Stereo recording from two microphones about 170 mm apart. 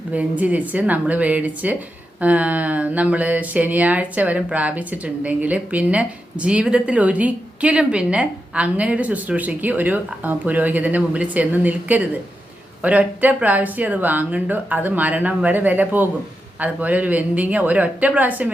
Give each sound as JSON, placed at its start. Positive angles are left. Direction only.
{"t": 0.1, "sound": "speech", "side_deg": -10}